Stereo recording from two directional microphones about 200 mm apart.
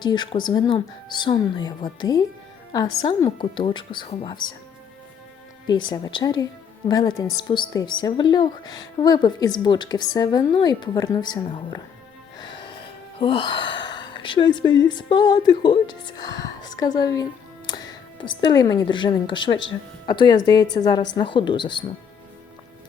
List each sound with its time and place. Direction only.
0.0 s a woman's voice: 20° left (ahead or behind)
5.9 s a woman's voice: 20° left (ahead or behind)
12.4 s music: 25° left (ahead or behind)
14.9 s a woman's voice: 20° left (ahead or behind)